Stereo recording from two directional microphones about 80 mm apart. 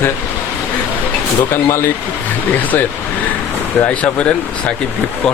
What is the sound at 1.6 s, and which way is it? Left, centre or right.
Speech, left.